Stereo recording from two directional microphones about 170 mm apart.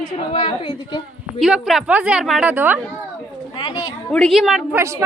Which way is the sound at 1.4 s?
Centre (ahead or behind).